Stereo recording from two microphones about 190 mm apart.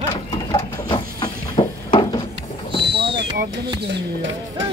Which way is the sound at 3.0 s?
60° right (ahead or behind).